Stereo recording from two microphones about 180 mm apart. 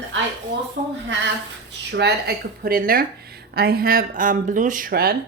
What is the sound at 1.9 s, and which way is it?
Speech, 65° right (ahead or behind).